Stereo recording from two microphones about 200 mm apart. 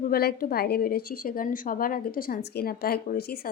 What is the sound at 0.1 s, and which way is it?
A woman's voice, 50° left (ahead or behind).